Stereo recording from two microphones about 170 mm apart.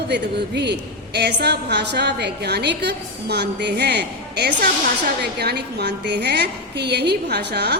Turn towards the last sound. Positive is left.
turn(degrees=-75)  # may be behind; listen again after turning